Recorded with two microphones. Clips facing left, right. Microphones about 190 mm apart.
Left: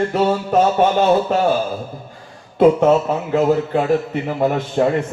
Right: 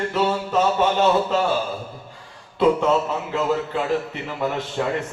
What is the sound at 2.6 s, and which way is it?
A man's voice, 50° left (ahead or behind).